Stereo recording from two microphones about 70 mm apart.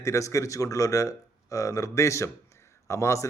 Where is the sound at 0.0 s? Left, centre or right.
Left.